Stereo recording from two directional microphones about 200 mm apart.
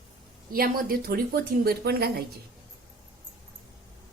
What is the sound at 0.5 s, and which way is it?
A woman's voice, 45° right (ahead or behind).